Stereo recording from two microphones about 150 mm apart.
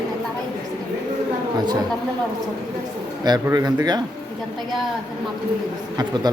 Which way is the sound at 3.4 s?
25° right (ahead or behind).